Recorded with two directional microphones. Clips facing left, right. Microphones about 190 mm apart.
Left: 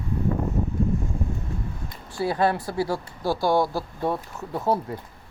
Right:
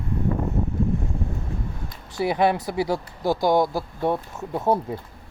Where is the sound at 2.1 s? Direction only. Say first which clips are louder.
Right 2 dB; 15° right (ahead or behind).